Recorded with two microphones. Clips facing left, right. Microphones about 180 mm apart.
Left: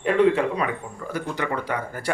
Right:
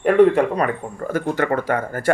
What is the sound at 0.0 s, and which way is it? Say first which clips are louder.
Speech: right 5 dB; 55° right (ahead or behind).